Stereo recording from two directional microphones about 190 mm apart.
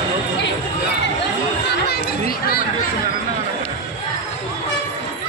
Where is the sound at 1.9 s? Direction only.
55° left (ahead or behind).